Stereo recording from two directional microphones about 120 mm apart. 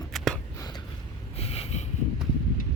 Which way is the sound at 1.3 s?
55° left (ahead or behind).